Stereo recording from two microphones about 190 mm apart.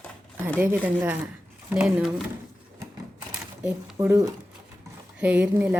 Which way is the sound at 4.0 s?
15° right (ahead or behind).